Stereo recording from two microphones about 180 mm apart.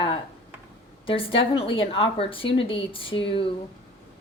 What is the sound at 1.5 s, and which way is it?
Speech, 30° left (ahead or behind).